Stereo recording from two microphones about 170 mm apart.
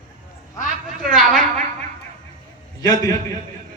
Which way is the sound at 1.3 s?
50° right (ahead or behind).